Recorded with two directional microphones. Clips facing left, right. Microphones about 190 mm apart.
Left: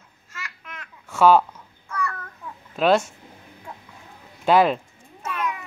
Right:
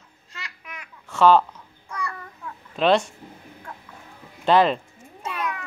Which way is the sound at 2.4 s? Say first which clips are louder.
Even; 5° left (ahead or behind).